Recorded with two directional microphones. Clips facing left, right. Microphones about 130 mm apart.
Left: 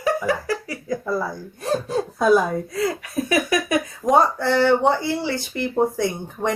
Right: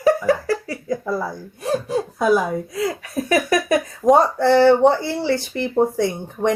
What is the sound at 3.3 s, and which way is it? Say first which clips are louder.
A woman's voice: right 3 dB; 35° right (ahead or behind).